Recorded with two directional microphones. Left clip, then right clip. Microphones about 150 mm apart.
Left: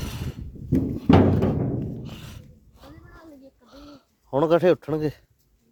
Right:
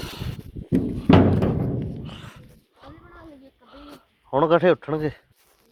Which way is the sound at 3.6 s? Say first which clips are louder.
Right 3 dB; 40° left (ahead or behind).